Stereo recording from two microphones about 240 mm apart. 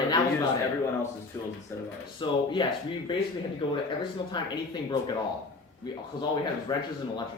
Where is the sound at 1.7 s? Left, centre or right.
Centre.